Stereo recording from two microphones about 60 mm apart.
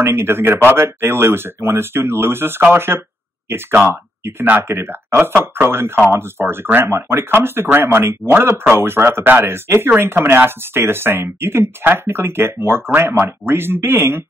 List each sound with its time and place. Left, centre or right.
0.0 s speech: right